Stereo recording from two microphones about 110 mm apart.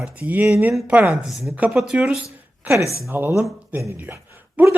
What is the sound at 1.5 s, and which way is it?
Speech, 10° right (ahead or behind).